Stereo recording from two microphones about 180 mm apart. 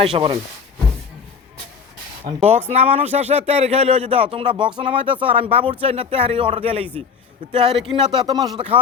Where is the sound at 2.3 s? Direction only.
35° right (ahead or behind).